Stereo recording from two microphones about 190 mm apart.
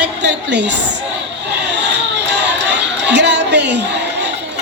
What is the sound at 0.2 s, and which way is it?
Speech, 65° right (ahead or behind).